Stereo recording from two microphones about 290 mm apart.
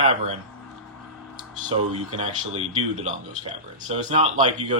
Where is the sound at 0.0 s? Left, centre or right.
Right.